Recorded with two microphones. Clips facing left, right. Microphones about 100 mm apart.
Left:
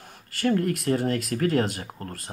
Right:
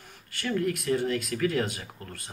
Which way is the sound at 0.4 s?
45° left (ahead or behind).